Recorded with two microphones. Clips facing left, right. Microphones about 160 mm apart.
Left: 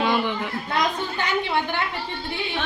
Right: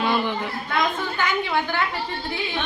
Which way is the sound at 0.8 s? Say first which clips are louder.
Right 1 dB; 30° left (ahead or behind).